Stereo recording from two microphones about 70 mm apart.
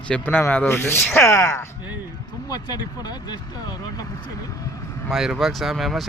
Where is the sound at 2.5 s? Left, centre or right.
Left.